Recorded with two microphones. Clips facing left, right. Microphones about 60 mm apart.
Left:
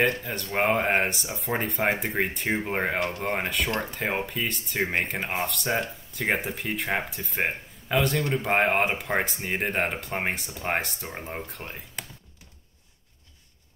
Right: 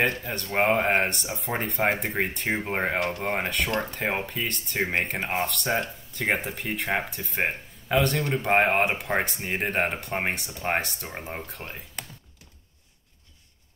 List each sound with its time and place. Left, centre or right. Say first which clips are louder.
0.0 s speech: left 1 dB; centre